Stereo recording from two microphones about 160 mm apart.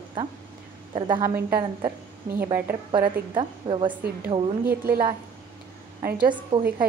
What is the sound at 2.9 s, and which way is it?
A woman's voice, 30° right (ahead or behind).